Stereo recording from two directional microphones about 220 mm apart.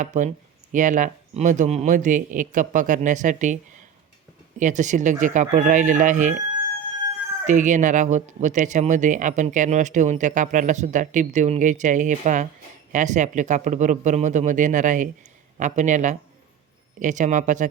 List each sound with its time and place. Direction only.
0.0 s speech: 35° right (ahead or behind)
7.4 s speech: 35° right (ahead or behind)